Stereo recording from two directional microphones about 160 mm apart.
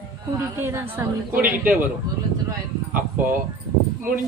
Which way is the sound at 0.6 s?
15° right (ahead or behind).